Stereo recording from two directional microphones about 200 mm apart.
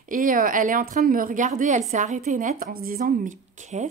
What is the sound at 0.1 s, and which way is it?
Speech, 45° right (ahead or behind).